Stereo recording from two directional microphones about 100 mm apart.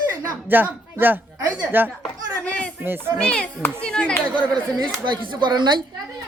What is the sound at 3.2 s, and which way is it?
Speech, 10° left (ahead or behind).